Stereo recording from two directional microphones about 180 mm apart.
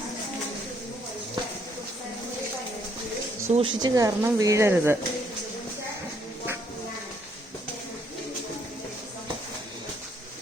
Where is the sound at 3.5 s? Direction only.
30° right (ahead or behind).